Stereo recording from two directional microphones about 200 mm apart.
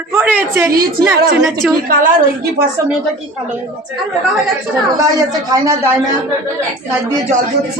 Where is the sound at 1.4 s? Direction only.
Centre (ahead or behind).